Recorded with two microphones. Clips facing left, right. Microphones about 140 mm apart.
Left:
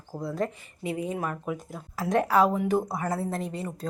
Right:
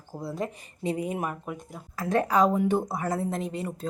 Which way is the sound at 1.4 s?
Centre (ahead or behind).